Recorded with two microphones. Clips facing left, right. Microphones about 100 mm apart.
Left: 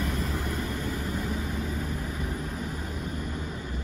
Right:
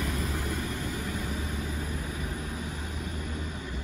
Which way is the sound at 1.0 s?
40° left (ahead or behind).